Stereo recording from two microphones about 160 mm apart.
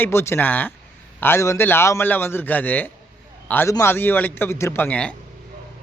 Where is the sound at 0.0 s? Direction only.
15° left (ahead or behind).